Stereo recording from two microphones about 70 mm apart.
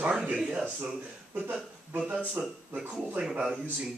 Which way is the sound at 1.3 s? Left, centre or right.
Right.